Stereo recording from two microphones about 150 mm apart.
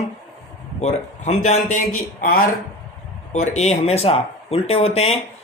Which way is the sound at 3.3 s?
50° left (ahead or behind).